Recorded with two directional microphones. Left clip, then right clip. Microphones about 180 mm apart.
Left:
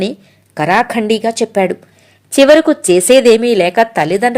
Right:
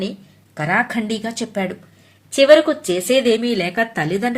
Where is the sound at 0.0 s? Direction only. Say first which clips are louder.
Left 8 dB; 50° left (ahead or behind).